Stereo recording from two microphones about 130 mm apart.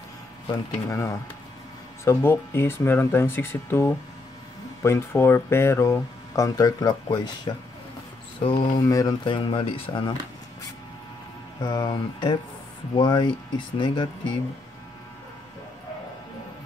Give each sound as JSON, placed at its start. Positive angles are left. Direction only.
{"t": 0.5, "sound": "speech", "side_deg": 20}
{"t": 11.6, "sound": "speech", "side_deg": 35}